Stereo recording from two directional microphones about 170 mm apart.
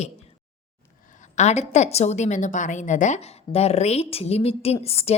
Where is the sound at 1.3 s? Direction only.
40° left (ahead or behind).